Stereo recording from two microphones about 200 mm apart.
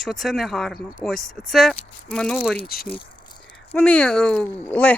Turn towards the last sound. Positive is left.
turn(degrees=5)  # may be behind; listen again after turning